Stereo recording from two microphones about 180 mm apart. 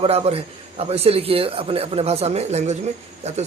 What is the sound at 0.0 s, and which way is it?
A man's voice, 30° right (ahead or behind).